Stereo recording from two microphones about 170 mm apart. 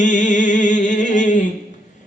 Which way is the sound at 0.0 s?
45° left (ahead or behind).